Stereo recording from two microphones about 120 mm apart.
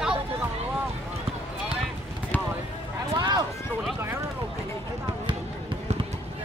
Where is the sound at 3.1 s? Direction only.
35° right (ahead or behind).